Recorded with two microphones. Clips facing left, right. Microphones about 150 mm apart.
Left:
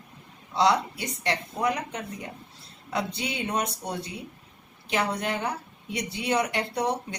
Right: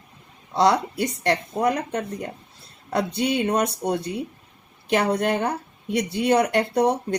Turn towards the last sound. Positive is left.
turn(degrees=-55)  # may be behind; listen again after turning